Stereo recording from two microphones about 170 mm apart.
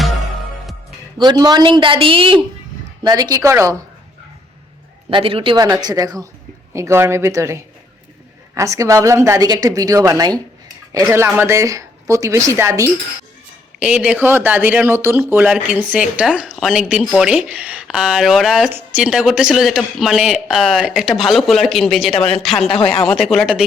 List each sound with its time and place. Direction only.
1.2 s a woman's voice: 25° right (ahead or behind)
5.1 s speech: 30° right (ahead or behind)
5.6 s a woman's voice: 20° right (ahead or behind); by 22.7 s centre (ahead or behind)
22.7 s speech: 30° left (ahead or behind)
23.0 s speech: centre (ahead or behind)